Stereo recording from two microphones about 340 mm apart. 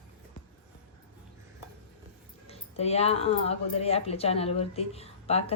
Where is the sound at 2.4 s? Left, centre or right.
Centre.